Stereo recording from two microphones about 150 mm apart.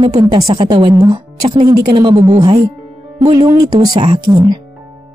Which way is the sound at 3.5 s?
25° right (ahead or behind).